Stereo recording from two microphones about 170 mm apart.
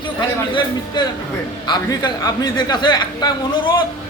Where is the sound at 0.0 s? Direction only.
30° left (ahead or behind).